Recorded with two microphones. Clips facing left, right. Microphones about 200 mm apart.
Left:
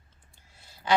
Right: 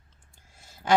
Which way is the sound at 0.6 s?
45° right (ahead or behind).